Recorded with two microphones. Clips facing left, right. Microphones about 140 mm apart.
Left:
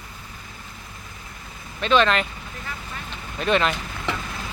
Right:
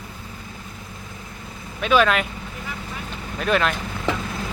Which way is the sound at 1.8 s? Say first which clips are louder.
Right 1 dB; 5° right (ahead or behind).